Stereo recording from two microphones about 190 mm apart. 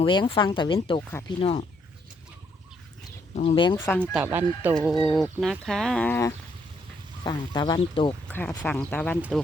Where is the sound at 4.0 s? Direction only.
5° right (ahead or behind).